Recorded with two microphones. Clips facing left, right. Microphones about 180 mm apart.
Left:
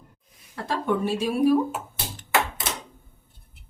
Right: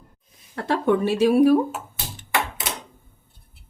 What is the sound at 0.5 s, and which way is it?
Speech, 70° right (ahead or behind).